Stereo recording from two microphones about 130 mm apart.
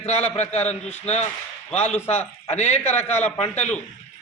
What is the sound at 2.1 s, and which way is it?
Speech, 55° left (ahead or behind).